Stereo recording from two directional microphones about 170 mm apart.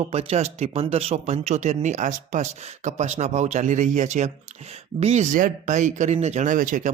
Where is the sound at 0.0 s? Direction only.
35° right (ahead or behind).